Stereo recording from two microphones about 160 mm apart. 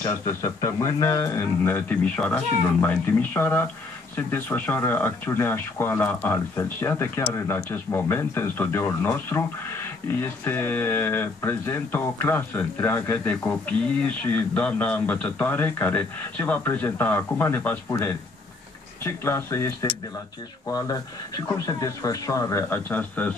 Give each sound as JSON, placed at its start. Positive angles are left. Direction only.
{"t": 0.1, "sound": "speech", "side_deg": 20}